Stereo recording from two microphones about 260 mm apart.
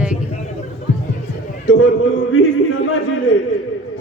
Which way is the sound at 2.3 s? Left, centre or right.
Left.